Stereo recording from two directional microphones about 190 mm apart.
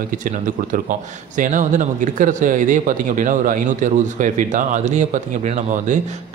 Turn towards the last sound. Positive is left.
turn(degrees=-40)  # may be behind; listen again after turning